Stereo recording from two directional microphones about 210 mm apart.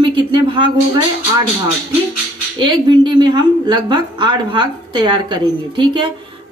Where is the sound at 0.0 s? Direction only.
25° right (ahead or behind).